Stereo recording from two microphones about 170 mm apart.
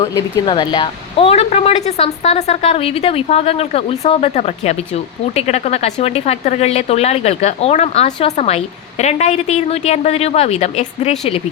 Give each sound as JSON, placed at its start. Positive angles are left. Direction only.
{"t": 0.1, "sound": "speech", "side_deg": 25}